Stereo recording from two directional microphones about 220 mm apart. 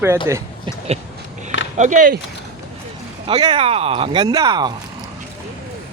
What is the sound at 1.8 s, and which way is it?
Speech, 35° right (ahead or behind).